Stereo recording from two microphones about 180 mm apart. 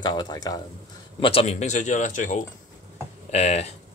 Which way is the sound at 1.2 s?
35° left (ahead or behind).